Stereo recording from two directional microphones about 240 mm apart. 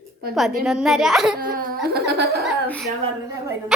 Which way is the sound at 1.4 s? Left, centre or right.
Right.